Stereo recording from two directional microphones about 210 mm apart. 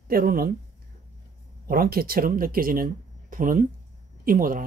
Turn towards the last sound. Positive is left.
turn(degrees=-40)  # may be behind; listen again after turning